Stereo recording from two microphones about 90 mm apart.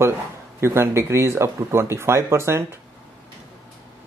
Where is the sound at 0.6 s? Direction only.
30° right (ahead or behind).